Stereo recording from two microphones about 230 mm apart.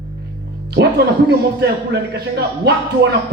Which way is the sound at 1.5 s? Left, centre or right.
Right.